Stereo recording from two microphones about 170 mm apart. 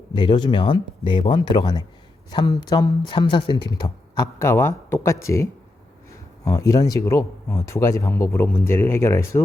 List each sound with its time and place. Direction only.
0.1 s speech: 30° left (ahead or behind)